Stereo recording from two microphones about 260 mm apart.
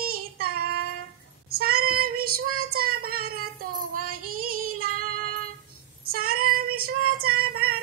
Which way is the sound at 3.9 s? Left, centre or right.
Right.